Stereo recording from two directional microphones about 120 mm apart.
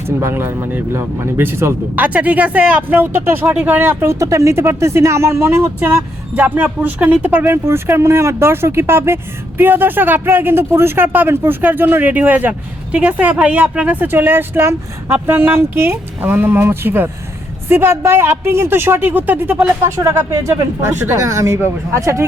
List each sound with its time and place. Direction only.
0.0 s speech: 20° right (ahead or behind)
19.8 s speech: 25° right (ahead or behind)